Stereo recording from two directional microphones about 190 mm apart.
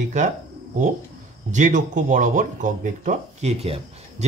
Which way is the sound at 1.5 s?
40° right (ahead or behind).